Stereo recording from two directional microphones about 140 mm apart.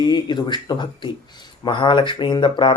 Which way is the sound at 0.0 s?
30° left (ahead or behind).